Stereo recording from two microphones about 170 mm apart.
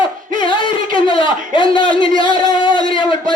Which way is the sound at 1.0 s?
30° left (ahead or behind).